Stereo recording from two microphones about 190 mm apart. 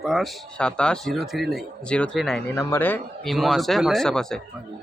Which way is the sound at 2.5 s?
10° left (ahead or behind).